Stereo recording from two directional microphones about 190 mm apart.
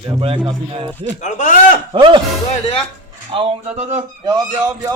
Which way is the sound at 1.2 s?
40° left (ahead or behind).